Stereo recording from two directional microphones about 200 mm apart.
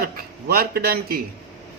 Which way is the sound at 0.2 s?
50° right (ahead or behind).